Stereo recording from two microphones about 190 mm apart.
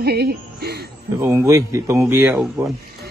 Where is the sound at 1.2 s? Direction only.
15° right (ahead or behind).